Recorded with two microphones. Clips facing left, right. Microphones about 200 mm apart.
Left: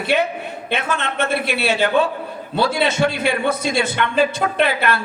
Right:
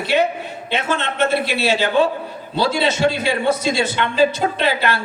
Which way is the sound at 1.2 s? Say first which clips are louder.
Right 3 dB; 55° left (ahead or behind).